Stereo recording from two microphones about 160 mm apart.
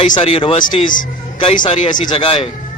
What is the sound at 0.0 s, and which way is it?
Speech, 30° left (ahead or behind).